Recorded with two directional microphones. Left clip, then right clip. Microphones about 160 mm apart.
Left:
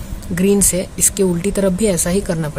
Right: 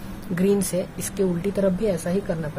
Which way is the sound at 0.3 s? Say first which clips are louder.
Left 6 dB; 50° left (ahead or behind).